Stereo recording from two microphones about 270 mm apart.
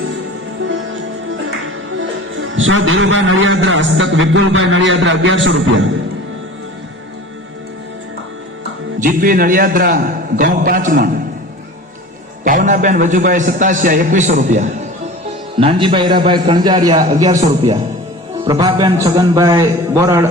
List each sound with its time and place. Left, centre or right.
2.6 s a man's voice: right
9.0 s a man's voice: right
12.5 s a man's voice: right; by 20.2 s centre